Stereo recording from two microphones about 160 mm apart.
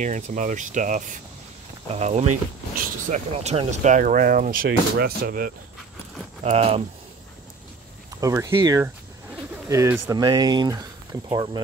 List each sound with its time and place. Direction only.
0.0 s speech: 50° right (ahead or behind); by 5.5 s 70° right (ahead or behind)
6.4 s speech: 40° right (ahead or behind)
8.2 s speech: 20° right (ahead or behind)
10.1 s speech: 25° right (ahead or behind)